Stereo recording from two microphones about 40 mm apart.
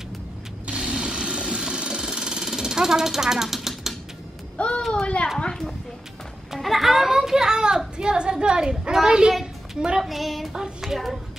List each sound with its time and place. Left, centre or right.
0.9 s a sound: right
4.6 s a sound: left
4.9 s a child's voice: left
6.5 s a woman's voice: centre
10.0 s speech: centre
10.5 s speech: centre